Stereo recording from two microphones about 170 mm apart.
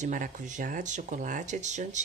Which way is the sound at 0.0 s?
50° right (ahead or behind).